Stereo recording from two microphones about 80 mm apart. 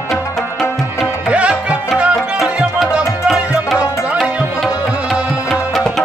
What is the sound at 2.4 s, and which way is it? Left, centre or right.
Music, centre.